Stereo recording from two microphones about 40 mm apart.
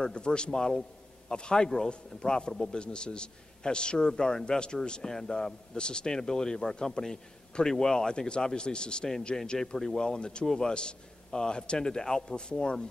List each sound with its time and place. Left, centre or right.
0.0 s a man's voice: left